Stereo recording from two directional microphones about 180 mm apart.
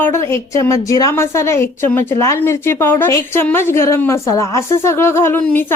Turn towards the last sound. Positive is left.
turn(degrees=10)  # may be behind; listen again after turning